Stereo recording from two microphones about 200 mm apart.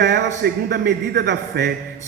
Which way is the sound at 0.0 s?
55° right (ahead or behind).